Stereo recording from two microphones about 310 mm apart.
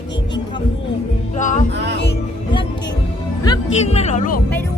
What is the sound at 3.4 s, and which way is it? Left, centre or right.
Speech, centre.